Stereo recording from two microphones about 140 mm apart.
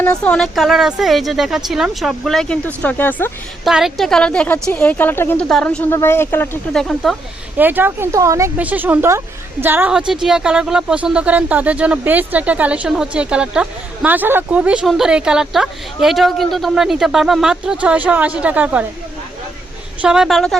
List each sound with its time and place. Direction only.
0.0 s speech: 10° left (ahead or behind)
3.6 s a woman's voice: 5° right (ahead or behind); by 5.5 s 15° left (ahead or behind)
5.5 s a woman's voice: 5° left (ahead or behind)
6.7 s speech: centre (ahead or behind)
7.6 s a woman's voice: 15° right (ahead or behind)
8.5 s a woman's voice: 10° right (ahead or behind)
20.0 s speech: 5° right (ahead or behind)